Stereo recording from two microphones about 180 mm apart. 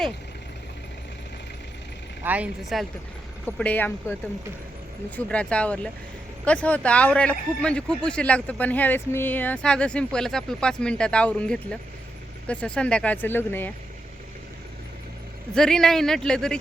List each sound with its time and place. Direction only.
2.2 s speech: 10° right (ahead or behind)
3.4 s speech: 10° left (ahead or behind)
15.5 s a man's voice: 5° left (ahead or behind)